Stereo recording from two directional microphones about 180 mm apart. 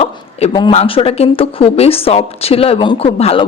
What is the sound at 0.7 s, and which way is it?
Speech, 30° left (ahead or behind).